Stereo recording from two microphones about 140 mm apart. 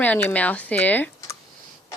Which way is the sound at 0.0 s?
15° left (ahead or behind).